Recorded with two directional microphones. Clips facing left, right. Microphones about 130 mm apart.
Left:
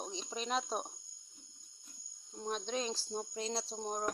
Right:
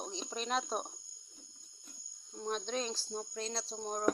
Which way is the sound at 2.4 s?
10° left (ahead or behind).